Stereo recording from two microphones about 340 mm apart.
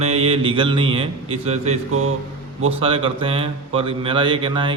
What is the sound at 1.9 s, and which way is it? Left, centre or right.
Mantra, right.